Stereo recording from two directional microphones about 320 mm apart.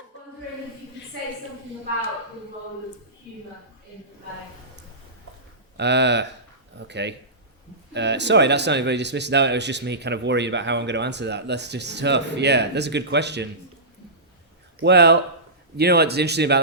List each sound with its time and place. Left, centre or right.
5.7 s speech: right
14.8 s speech: right